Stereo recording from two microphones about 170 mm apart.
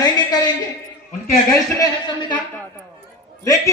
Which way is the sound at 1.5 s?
20° left (ahead or behind).